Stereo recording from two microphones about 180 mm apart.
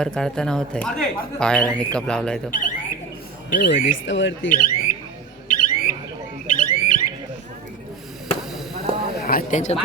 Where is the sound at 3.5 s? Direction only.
70° left (ahead or behind); by 4.3 s 90° left.